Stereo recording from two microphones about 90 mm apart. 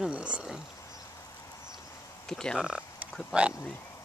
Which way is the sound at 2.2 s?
10° left (ahead or behind).